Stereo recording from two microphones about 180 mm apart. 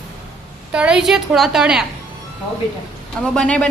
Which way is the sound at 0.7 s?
5° right (ahead or behind).